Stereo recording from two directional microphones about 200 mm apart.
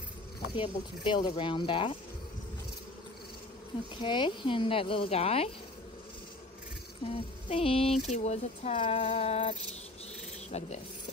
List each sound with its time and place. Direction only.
0.6 s speech: 25° left (ahead or behind)
3.9 s speech: 25° left (ahead or behind)
7.1 s speech: 30° left (ahead or behind)